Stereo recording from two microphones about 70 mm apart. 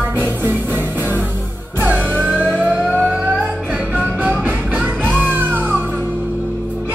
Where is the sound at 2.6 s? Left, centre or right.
Right.